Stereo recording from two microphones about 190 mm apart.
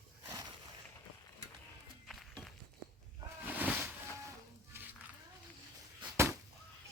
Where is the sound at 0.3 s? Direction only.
20° right (ahead or behind).